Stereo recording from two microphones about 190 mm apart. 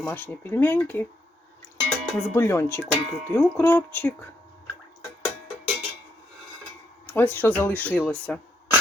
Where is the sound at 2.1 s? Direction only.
10° left (ahead or behind).